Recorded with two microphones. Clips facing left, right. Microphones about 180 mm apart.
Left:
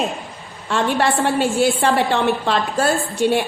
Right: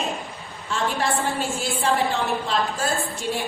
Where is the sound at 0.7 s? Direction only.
70° left (ahead or behind).